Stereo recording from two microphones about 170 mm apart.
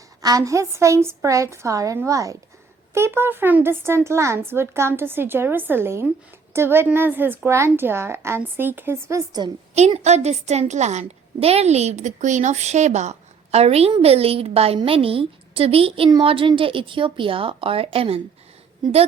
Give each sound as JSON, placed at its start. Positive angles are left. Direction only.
{"t": 0.2, "sound": "a woman's voice", "side_deg": -20}
{"t": 9.7, "sound": "a woman's voice", "side_deg": -40}